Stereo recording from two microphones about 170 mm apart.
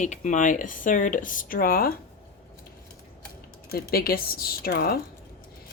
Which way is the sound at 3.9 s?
60° left (ahead or behind).